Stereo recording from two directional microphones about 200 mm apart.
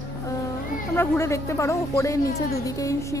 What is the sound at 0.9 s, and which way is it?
A woman's voice, 10° left (ahead or behind).